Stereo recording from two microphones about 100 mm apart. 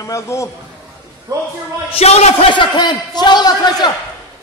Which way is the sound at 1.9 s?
90° left.